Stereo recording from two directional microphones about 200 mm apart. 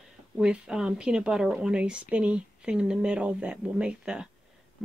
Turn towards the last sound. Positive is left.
turn(degrees=-5)  # may be behind; listen again after turning